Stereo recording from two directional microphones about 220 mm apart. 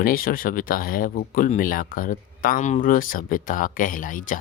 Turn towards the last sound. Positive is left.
turn(degrees=35)  # may be behind; listen again after turning